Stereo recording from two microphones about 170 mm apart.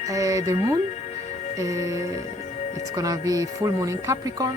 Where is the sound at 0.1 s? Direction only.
20° right (ahead or behind).